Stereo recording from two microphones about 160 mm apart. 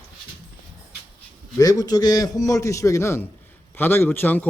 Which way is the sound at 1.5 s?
20° left (ahead or behind).